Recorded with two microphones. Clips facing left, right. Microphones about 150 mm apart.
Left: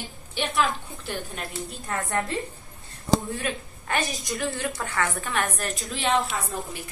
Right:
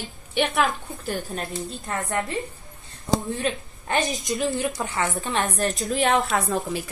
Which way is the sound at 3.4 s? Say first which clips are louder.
Right 4 dB; 20° right (ahead or behind).